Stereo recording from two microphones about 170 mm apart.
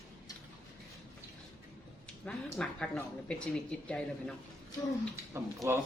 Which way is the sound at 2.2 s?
5° left (ahead or behind).